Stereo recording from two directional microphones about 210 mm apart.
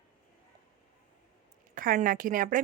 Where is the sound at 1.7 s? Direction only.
40° right (ahead or behind).